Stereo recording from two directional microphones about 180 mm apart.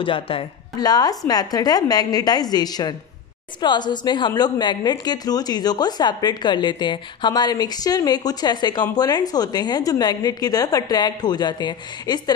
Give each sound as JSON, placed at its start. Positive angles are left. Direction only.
{"t": 0.0, "sound": "a woman's voice", "side_deg": 30}